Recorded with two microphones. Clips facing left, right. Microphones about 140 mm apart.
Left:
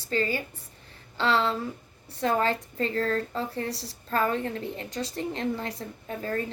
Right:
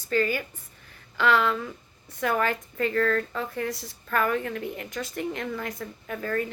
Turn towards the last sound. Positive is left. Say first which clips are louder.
# right 2 dB
turn(degrees=30)  # may be behind; listen again after turning